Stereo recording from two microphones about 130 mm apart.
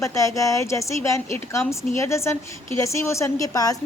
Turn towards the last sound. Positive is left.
turn(degrees=30)  # may be behind; listen again after turning